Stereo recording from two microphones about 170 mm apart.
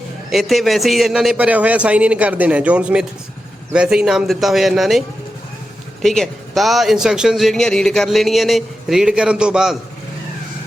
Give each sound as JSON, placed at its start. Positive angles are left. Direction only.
{"t": 0.3, "sound": "a man's voice", "side_deg": 0}